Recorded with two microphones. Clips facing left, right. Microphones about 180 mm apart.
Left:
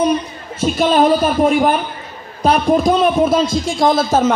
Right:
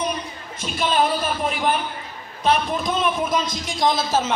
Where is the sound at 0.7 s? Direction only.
45° left (ahead or behind).